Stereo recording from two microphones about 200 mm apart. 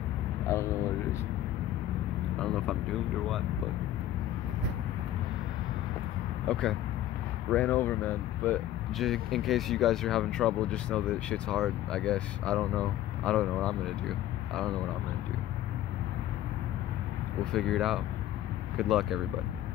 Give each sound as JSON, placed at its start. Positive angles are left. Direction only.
{"t": 2.4, "sound": "speech", "side_deg": 0}
{"t": 6.4, "sound": "speech", "side_deg": 5}
{"t": 17.5, "sound": "speech", "side_deg": 0}